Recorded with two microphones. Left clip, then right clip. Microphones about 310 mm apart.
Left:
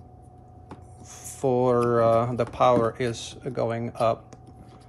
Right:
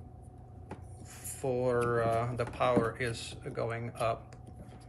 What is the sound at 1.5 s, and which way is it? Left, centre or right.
Speech, centre.